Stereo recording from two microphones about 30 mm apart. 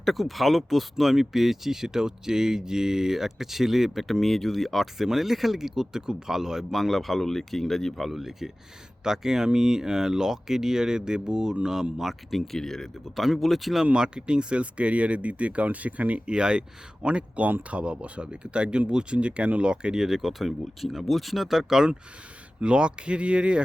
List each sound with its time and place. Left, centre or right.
0.0 s speech: centre
4.1 s speech: centre
6.7 s speech: centre
7.9 s speech: centre
9.0 s speech: centre
12.0 s speech: centre
12.5 s speech: centre
13.1 s speech: centre
13.9 s speech: right
16.2 s speech: right; by 20.5 s centre
20.9 s speech: centre
22.6 s speech: right